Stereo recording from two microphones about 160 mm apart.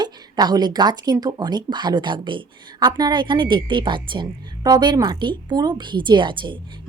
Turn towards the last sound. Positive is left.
turn(degrees=-30)  # may be behind; listen again after turning